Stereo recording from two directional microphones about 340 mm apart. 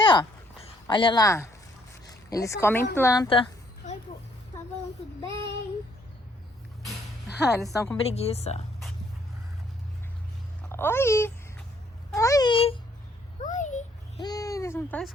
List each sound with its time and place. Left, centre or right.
0.0 s a sound: centre
2.0 s a woman's voice: centre
6.8 s a sound: centre
8.0 s a child's voice: centre
10.6 s a child's voice: centre
13.4 s babbling: left; by 15.1 s centre